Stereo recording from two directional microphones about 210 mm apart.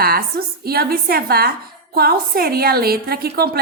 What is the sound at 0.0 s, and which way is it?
Speech, 45° right (ahead or behind).